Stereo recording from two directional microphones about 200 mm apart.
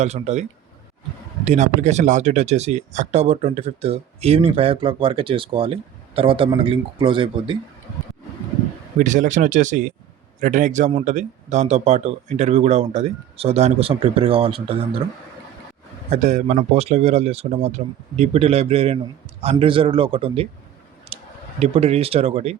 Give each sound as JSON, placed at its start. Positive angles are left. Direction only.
{"t": 0.0, "sound": "speech", "side_deg": -35}
{"t": 1.5, "sound": "a man's voice", "side_deg": -35}
{"t": 9.0, "sound": "speech", "side_deg": -40}
{"t": 16.0, "sound": "a man's voice", "side_deg": -35}
{"t": 21.1, "sound": "clicking", "side_deg": -30}
{"t": 21.6, "sound": "speech", "side_deg": -30}